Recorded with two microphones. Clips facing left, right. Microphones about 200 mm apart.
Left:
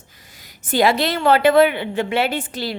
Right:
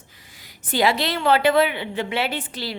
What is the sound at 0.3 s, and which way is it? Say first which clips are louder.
A woman's voice: left 4 dB; 45° left (ahead or behind).